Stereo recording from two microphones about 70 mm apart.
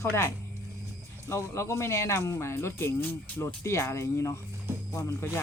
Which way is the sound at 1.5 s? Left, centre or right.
Left.